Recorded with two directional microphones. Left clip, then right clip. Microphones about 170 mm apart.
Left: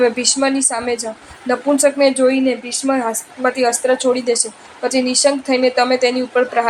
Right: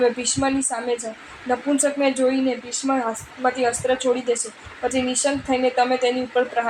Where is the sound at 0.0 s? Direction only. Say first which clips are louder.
Left 5 dB; 40° left (ahead or behind).